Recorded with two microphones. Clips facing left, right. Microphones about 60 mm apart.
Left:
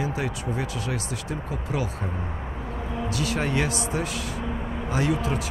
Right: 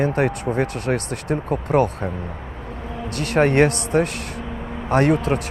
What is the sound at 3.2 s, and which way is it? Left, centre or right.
Speech, right.